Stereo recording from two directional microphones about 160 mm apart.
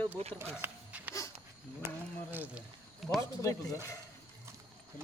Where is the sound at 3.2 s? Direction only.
20° left (ahead or behind).